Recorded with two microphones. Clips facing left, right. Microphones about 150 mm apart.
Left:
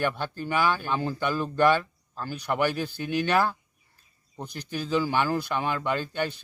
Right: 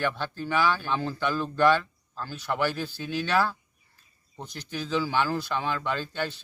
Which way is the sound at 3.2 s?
55° left (ahead or behind).